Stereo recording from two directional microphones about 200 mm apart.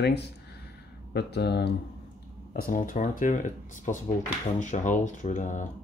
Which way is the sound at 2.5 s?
45° left (ahead or behind).